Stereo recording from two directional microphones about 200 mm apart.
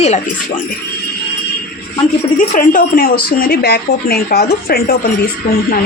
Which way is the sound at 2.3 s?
40° left (ahead or behind).